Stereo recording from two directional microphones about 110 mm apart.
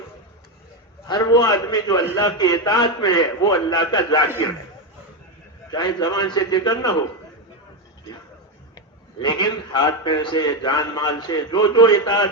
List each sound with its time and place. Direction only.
1.0 s a man's voice: 35° left (ahead or behind)
5.7 s a man's voice: 40° left (ahead or behind)
9.1 s a man's voice: 45° left (ahead or behind)